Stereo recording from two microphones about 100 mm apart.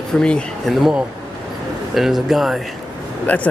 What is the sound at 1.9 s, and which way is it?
Speech, 5° right (ahead or behind).